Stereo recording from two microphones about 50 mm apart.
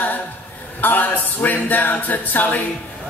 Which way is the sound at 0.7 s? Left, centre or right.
Left.